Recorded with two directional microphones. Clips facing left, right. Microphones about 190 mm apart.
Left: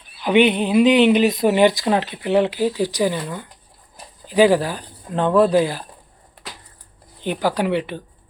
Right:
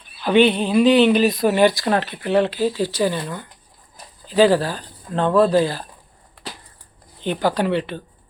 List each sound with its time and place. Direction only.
0.2 s speech: 15° left (ahead or behind)
7.3 s speech: 10° left (ahead or behind)